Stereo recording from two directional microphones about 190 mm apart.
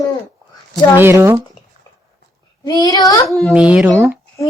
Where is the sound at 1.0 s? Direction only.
10° right (ahead or behind).